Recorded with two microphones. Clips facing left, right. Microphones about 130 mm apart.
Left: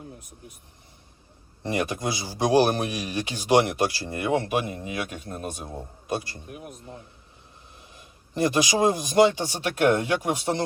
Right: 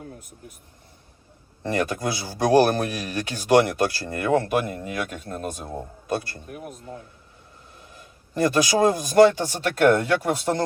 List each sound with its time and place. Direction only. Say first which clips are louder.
1.6 s speech: right 2 dB; 15° left (ahead or behind)
4.6 s speech: right 2 dB; 50° right (ahead or behind)
6.1 s speech: right 2 dB; 15° left (ahead or behind)
6.6 s speech: right 3 dB; 45° right (ahead or behind)
8.4 s speech: right 2 dB; 15° left (ahead or behind)